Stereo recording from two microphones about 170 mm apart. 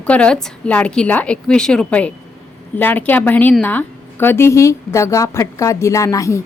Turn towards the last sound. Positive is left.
turn(degrees=20)  # may be behind; listen again after turning